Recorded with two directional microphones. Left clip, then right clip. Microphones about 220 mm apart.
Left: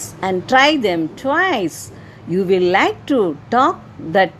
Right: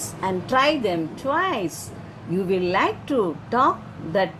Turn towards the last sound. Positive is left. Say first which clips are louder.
# left 7 dB
turn(degrees=40)  # may be behind; listen again after turning